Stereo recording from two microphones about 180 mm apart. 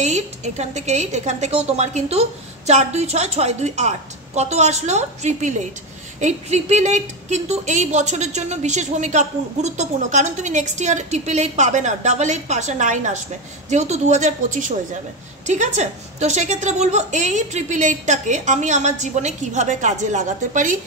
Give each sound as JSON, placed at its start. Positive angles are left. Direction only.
{"t": 0.0, "sound": "a woman's voice", "side_deg": -40}